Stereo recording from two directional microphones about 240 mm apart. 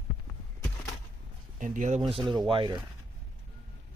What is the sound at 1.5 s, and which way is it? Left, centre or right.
Speech, right.